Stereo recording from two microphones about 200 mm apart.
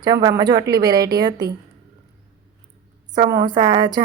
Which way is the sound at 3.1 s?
20° right (ahead or behind).